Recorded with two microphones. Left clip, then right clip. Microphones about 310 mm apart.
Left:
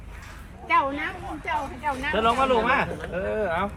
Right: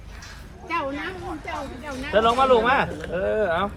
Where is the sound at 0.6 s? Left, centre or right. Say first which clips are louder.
Left 5 dB; centre.